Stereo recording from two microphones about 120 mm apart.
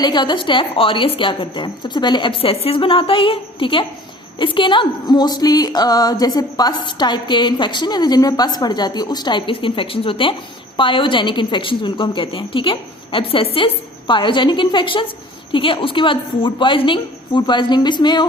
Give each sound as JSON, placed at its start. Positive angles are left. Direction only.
{"t": 0.0, "sound": "a woman's voice", "side_deg": 35}